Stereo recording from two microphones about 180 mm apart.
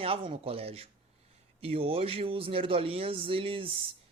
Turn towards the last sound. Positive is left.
turn(degrees=-30)  # may be behind; listen again after turning